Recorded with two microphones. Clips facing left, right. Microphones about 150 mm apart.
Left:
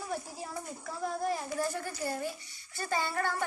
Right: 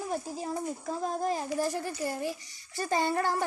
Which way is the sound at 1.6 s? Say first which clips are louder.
Right 3 dB; 15° right (ahead or behind).